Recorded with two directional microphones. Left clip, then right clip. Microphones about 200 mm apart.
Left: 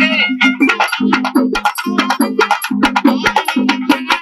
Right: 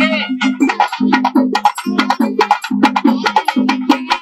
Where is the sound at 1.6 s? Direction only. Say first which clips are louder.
Right 1 dB; 15° right (ahead or behind).